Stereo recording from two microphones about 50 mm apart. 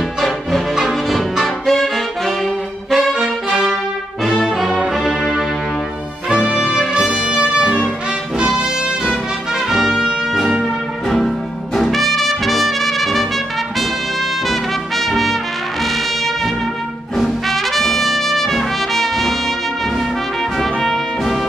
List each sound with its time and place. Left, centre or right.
0.7 s music: centre
1.7 s saxophone: centre
2.9 s brass instrument: centre
4.5 s music: centre
6.2 s music: centre
9.7 s brass instrument: centre
11.1 s music: centre
14.5 s trumpet: centre
17.2 s trumpet: centre
20.5 s brass instrument: centre